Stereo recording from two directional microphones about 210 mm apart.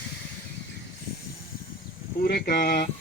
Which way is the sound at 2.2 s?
45° left (ahead or behind).